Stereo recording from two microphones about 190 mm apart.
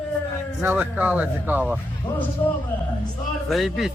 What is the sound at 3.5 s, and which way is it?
Speech, centre (ahead or behind).